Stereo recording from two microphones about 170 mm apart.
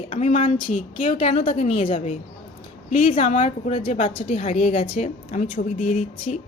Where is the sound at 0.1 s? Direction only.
35° left (ahead or behind).